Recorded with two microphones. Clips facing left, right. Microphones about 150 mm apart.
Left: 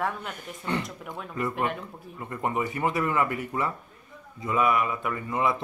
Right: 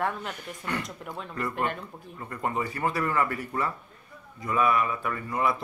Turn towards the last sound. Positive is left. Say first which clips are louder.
# left 1 dB
turn(degrees=20)  # may be behind; listen again after turning